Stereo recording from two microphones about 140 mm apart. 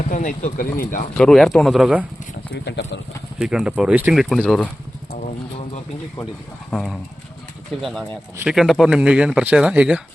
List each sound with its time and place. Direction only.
0.1 s speech: 65° left (ahead or behind); by 1.0 s 85° left
1.1 s speech: 5° left (ahead or behind)
3.3 s speech: 5° right (ahead or behind)
6.7 s speech: 5° left (ahead or behind)